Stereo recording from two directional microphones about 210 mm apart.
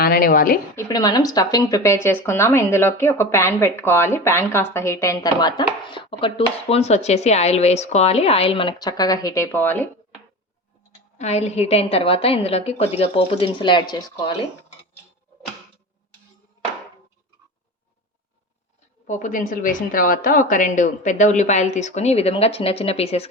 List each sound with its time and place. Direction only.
0.0 s a woman's voice: 45° left (ahead or behind)
0.8 s speech: 20° left (ahead or behind)
11.2 s a woman's voice: 30° left (ahead or behind)
19.0 s a woman's voice: 40° left (ahead or behind)